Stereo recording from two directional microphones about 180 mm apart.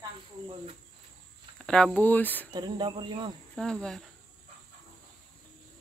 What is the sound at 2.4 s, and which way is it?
Speech, 25° right (ahead or behind).